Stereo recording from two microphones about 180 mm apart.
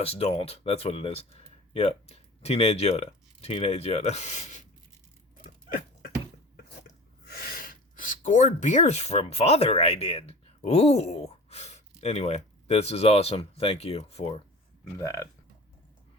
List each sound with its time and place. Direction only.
0.0 s speech: 35° left (ahead or behind)
7.3 s speech: 55° left (ahead or behind); by 14.4 s 30° left (ahead or behind)
15.0 s speech: 20° left (ahead or behind)